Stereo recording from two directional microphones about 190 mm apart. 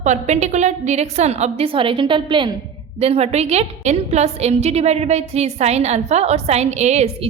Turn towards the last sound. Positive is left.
turn(degrees=-35)  # may be behind; listen again after turning